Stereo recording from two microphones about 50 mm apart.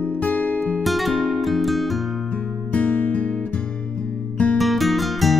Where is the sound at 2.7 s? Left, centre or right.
Left.